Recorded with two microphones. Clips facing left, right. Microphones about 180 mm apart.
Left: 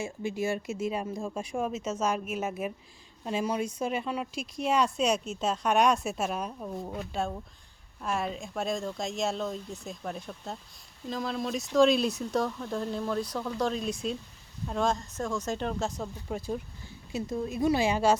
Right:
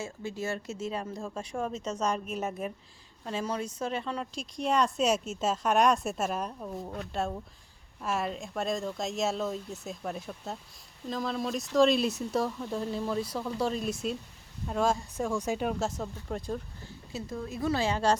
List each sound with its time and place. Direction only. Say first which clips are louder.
0.0 s speech: left 4 dB; 15° left (ahead or behind)
17.1 s speech: left 5 dB; 20° left (ahead or behind)